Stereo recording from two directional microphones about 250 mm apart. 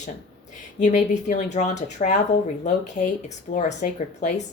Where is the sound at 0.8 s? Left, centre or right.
Left.